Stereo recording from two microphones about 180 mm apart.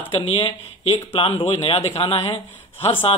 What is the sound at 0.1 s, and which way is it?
Speech, 30° left (ahead or behind).